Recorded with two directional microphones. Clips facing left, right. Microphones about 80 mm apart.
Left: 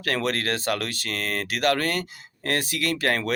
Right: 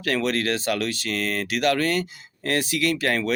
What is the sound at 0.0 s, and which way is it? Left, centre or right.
Speech, left.